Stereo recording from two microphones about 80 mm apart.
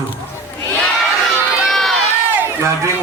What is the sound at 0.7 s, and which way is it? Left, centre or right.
Crowd, centre.